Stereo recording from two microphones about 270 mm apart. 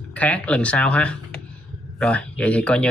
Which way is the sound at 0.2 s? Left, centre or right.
Centre.